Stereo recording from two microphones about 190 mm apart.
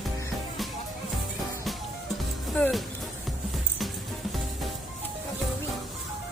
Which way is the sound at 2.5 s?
5° left (ahead or behind).